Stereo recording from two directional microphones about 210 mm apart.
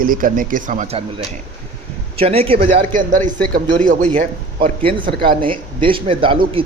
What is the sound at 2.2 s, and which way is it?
Speech, 30° right (ahead or behind).